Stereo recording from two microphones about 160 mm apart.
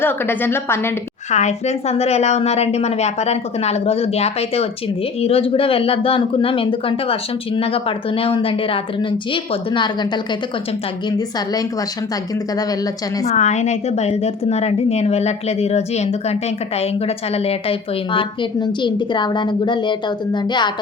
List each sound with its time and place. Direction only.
0.0 s a woman's voice: 15° left (ahead or behind)
1.3 s speech: 45° left (ahead or behind); by 10.1 s 30° left (ahead or behind)
13.2 s speech: 45° left (ahead or behind); by 20.7 s 30° left (ahead or behind)